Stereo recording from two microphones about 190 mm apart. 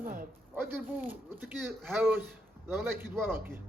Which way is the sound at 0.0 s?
45° right (ahead or behind).